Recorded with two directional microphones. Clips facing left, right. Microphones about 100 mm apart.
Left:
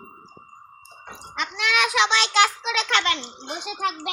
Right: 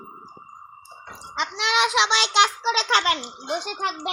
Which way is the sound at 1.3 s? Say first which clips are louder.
Right 2 dB; 20° right (ahead or behind).